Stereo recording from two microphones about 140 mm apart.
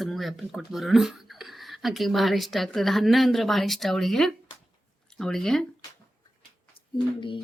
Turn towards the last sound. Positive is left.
turn(degrees=35)  # may be behind; listen again after turning